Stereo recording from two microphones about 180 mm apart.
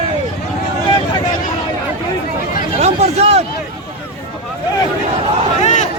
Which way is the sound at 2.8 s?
35° right (ahead or behind).